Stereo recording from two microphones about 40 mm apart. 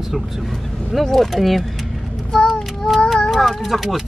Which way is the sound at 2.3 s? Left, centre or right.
Centre.